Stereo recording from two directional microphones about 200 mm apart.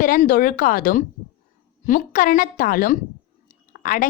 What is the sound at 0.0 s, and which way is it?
A woman's voice, 40° left (ahead or behind).